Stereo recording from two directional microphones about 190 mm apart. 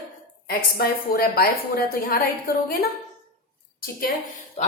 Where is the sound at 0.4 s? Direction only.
50° left (ahead or behind).